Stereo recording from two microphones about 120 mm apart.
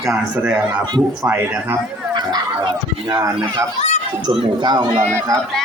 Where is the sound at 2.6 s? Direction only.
35° right (ahead or behind).